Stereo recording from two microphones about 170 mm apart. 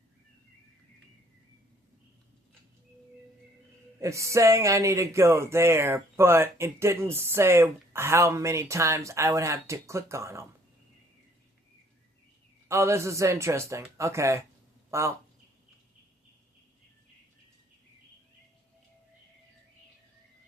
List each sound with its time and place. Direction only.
4.0 s speech: 15° right (ahead or behind)
12.6 s speech: 15° right (ahead or behind)
14.8 s a sound: 15° right (ahead or behind)